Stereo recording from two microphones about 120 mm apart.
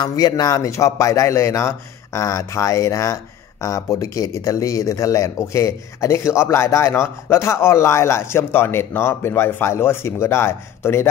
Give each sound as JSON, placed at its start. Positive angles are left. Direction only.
{"t": 0.0, "sound": "speech", "side_deg": 35}